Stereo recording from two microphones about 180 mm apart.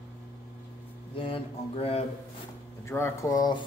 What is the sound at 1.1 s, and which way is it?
Speech, 30° left (ahead or behind).